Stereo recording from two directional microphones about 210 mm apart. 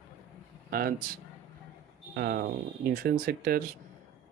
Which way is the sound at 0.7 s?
45° right (ahead or behind).